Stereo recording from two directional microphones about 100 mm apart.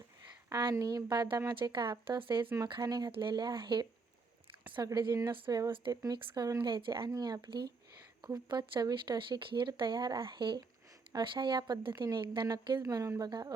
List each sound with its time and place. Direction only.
0.5 s speech: 35° right (ahead or behind); by 2.5 s 55° right (ahead or behind)
2.8 s speech: 40° right (ahead or behind)
3.1 s speech: 50° right (ahead or behind)
7.1 s speech: 35° right (ahead or behind)
12.8 s speech: 35° right (ahead or behind)